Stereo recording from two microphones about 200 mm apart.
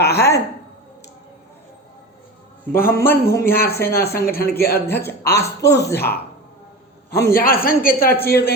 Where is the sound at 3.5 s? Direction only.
50° left (ahead or behind).